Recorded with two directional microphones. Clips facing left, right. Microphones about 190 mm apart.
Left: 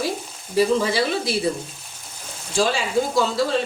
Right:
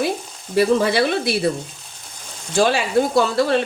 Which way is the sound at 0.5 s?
65° right (ahead or behind).